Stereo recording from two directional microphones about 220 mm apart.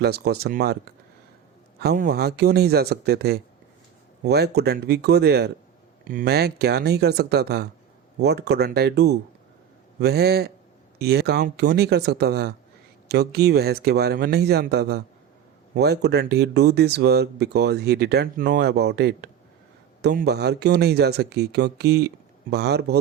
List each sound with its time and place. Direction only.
0.0 s speech: 45° right (ahead or behind)